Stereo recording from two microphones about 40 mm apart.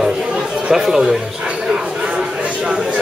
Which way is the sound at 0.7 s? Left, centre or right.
Centre.